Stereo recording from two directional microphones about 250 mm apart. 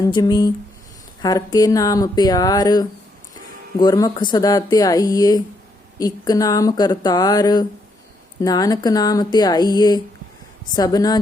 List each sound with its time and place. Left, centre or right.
0.0 s speech: centre